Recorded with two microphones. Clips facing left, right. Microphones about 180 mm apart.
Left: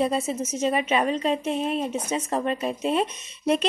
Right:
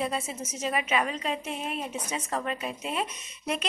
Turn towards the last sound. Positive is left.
turn(degrees=30)  # may be behind; listen again after turning